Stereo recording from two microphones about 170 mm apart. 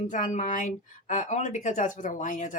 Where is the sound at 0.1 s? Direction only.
50° left (ahead or behind).